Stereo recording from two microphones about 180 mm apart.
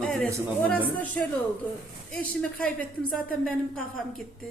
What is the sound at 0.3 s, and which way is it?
Speech, 15° right (ahead or behind).